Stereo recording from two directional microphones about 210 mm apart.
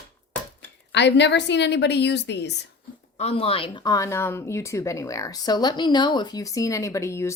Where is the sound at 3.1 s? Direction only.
30° left (ahead or behind).